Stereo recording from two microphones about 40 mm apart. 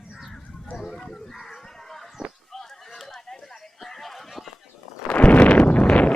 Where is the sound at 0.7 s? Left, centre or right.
Centre.